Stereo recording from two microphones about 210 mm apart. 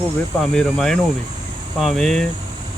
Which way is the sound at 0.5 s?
5° left (ahead or behind).